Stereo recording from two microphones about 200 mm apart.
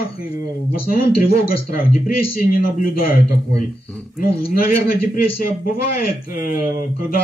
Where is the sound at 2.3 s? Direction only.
45° left (ahead or behind).